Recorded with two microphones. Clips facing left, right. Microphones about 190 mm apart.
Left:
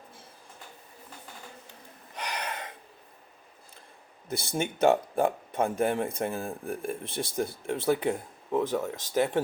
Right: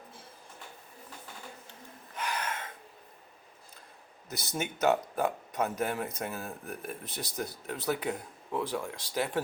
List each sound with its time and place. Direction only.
2.2 s gasp: 35° left (ahead or behind)
4.3 s speech: 30° left (ahead or behind)